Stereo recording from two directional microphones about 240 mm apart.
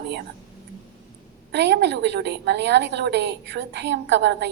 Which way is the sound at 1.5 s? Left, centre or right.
Right.